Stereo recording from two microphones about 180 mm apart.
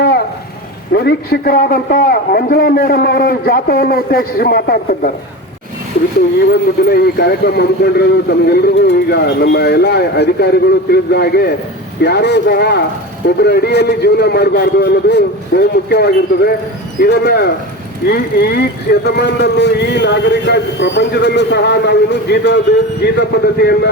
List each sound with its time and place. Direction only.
0.9 s a man's voice: 65° left (ahead or behind)
6.8 s a man's voice: 60° left (ahead or behind)